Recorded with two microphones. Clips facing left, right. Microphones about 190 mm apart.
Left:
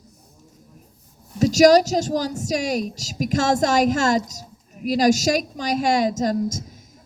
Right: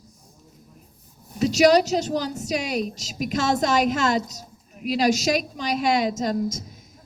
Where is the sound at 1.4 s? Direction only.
40° left (ahead or behind).